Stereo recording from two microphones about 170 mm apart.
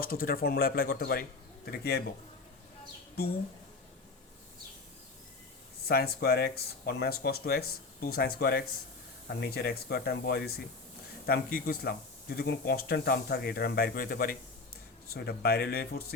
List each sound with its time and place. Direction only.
0.0 s speech: 55° left (ahead or behind)
5.9 s speech: 65° left (ahead or behind)